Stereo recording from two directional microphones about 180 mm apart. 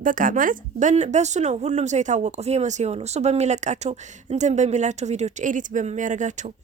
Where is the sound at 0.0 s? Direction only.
50° right (ahead or behind).